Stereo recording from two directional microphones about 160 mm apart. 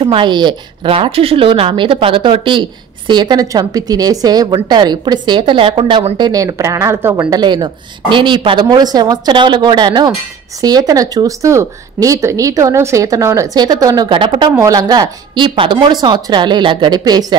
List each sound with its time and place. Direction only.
0.0 s a woman's voice: 30° right (ahead or behind)
14.5 s a woman's voice: 20° right (ahead or behind)